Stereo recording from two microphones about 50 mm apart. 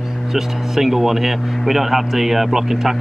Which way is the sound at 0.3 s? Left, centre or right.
Centre.